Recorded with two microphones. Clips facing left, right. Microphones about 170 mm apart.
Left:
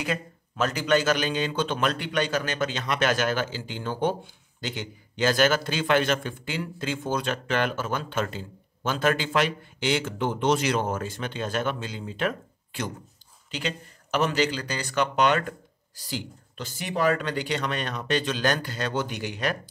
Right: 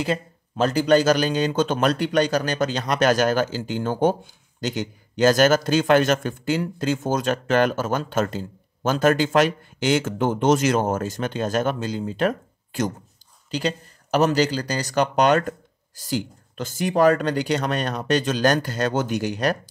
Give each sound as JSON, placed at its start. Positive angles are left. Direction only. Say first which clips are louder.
{"t": 0.0, "sound": "a man's voice", "louder": "right 5 dB", "side_deg": -30}